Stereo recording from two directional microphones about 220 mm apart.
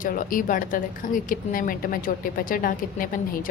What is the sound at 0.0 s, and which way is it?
Speech, 40° left (ahead or behind).